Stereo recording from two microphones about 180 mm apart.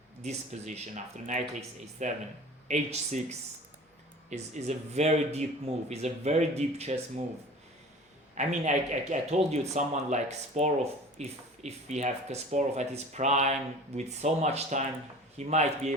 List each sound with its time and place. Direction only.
0.2 s speech: 40° right (ahead or behind)
2.0 s speech: 40° right (ahead or behind)
8.4 s speech: 40° right (ahead or behind)